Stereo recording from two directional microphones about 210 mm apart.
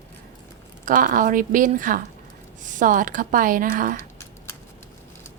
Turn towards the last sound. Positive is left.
turn(degrees=15)  # may be behind; listen again after turning